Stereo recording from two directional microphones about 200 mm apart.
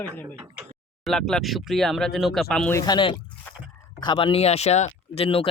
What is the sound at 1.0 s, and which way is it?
Speech, centre (ahead or behind).